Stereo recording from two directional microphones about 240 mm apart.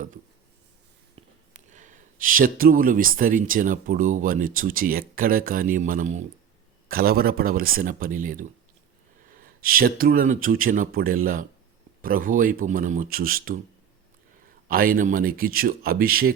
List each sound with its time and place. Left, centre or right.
1.2 s a sound: right
1.5 s speech: right
14.7 s speech: right